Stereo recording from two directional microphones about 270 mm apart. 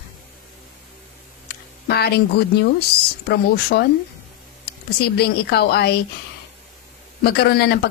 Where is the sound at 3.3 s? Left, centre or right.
Left.